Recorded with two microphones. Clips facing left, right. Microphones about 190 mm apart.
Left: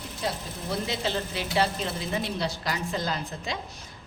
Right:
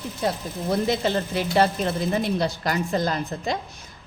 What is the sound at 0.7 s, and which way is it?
Speech, 50° right (ahead or behind).